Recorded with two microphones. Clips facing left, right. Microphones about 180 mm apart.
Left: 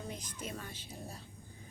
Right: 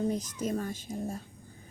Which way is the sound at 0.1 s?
40° right (ahead or behind).